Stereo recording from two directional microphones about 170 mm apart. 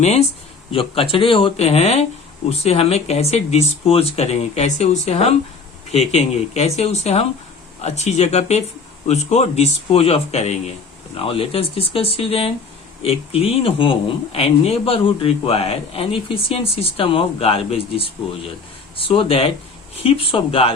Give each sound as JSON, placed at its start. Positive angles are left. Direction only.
{"t": 0.7, "sound": "speech", "side_deg": 35}